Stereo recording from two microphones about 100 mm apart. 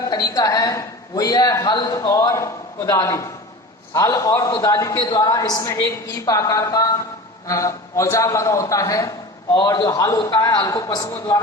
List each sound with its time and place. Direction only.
0.1 s a woman's voice: 40° left (ahead or behind)